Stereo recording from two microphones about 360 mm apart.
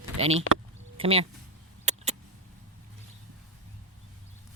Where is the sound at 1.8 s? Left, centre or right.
Centre.